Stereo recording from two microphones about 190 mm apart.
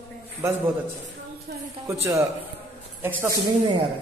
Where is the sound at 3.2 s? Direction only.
20° right (ahead or behind).